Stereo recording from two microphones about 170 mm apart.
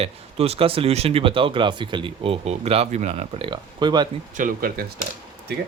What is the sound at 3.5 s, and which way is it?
Speech, 25° right (ahead or behind).